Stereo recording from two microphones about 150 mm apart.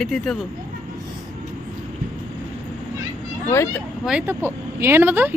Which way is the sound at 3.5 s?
20° left (ahead or behind).